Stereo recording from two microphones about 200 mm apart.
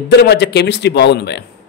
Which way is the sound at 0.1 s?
55° left (ahead or behind).